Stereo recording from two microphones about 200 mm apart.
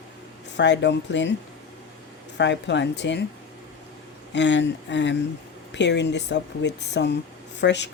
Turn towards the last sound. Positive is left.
turn(degrees=60)  # may be behind; listen again after turning